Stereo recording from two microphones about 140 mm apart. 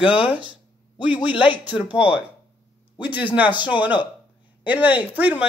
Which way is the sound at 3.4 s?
35° left (ahead or behind).